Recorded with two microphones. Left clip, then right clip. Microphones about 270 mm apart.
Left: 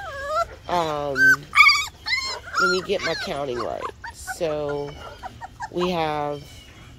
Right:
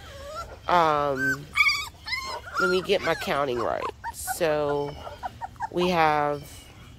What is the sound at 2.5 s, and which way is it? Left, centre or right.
Speech, centre.